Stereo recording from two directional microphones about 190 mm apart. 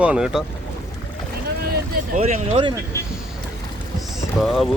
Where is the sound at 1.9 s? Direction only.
45° right (ahead or behind).